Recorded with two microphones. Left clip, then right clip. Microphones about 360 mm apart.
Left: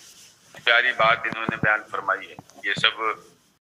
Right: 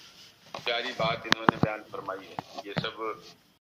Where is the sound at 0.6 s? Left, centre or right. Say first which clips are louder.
Left 11 dB; left.